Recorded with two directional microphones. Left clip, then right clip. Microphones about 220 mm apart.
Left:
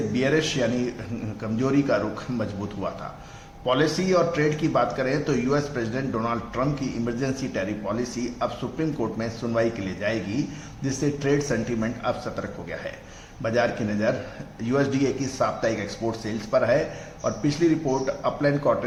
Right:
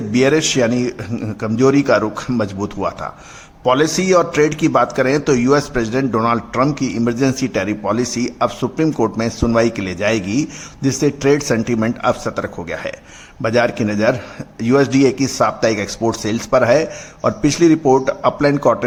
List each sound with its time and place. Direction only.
0.1 s a man's voice: 45° right (ahead or behind)